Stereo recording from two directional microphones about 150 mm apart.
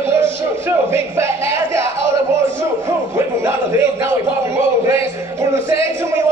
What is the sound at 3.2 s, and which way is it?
Speech, 15° right (ahead or behind).